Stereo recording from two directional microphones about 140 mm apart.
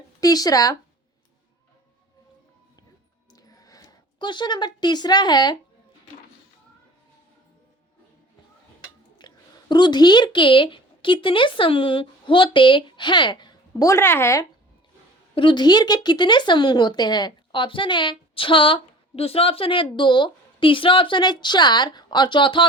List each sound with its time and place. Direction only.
0.2 s speech: 25° left (ahead or behind)
3.3 s a sound: 25° left (ahead or behind)
4.2 s speech: 35° left (ahead or behind)
9.1 s a woman's voice: 30° left (ahead or behind)
15.4 s speech: 35° left (ahead or behind)